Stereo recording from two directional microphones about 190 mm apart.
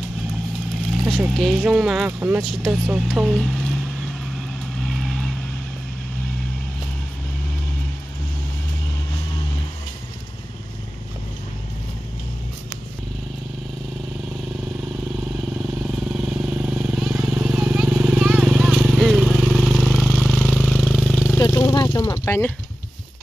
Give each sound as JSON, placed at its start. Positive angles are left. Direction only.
{"t": 1.0, "sound": "speech", "side_deg": 0}
{"t": 4.8, "sound": "vehicle", "side_deg": 0}
{"t": 16.1, "sound": "vehicle", "side_deg": -5}
{"t": 21.4, "sound": "vehicle", "side_deg": 15}